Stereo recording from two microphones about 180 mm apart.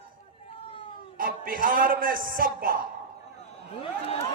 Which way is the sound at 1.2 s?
50° right (ahead or behind).